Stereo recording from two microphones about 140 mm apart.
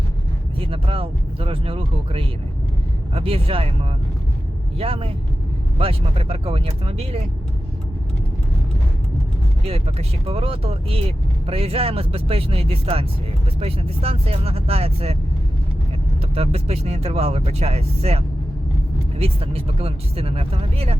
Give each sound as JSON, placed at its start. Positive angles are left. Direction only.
{"t": 0.6, "sound": "speech", "side_deg": -40}
{"t": 4.8, "sound": "speech", "side_deg": -45}
{"t": 9.6, "sound": "speech", "side_deg": -45}
{"t": 16.3, "sound": "speech", "side_deg": -45}
{"t": 19.2, "sound": "speech", "side_deg": -45}